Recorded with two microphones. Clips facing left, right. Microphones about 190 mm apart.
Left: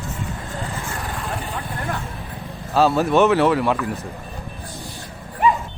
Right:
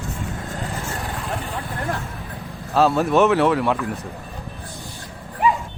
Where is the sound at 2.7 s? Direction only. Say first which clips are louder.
Even; centre (ahead or behind).